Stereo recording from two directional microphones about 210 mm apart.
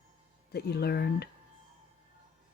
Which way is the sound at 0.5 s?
50° left (ahead or behind).